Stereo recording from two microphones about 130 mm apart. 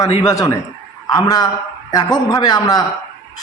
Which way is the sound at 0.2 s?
25° left (ahead or behind).